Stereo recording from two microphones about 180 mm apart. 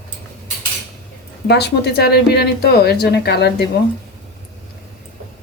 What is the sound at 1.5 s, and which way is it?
A woman's voice, 65° left (ahead or behind).